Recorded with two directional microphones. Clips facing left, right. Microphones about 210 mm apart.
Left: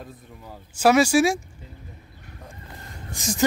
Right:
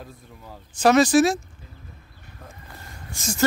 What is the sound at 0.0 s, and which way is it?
Speech, centre (ahead or behind).